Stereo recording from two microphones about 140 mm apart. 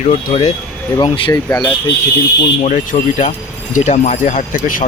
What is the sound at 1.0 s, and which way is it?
Speech, 30° left (ahead or behind).